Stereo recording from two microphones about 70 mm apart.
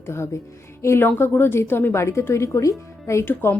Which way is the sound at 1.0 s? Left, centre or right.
Left.